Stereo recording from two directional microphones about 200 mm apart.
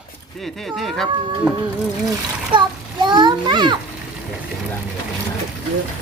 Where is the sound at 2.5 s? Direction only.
25° right (ahead or behind).